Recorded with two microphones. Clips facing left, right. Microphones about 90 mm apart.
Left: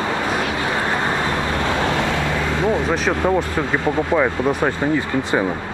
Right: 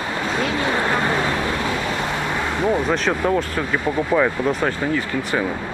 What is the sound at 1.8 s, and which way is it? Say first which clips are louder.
Vehicle: left 4 dB; 90° left.